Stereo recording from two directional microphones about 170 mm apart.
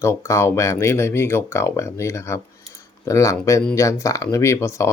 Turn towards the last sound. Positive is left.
turn(degrees=15)  # may be behind; listen again after turning